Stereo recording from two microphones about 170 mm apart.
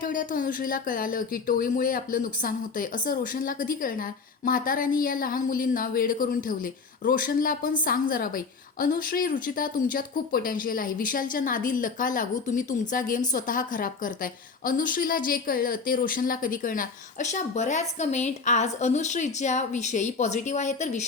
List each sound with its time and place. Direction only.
0.0 s a woman's voice: 50° left (ahead or behind)